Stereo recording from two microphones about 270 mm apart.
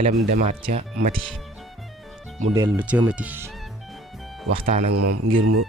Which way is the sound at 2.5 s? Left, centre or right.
Centre.